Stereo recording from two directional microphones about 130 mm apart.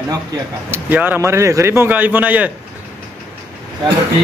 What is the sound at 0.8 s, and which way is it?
A man's voice, 15° right (ahead or behind).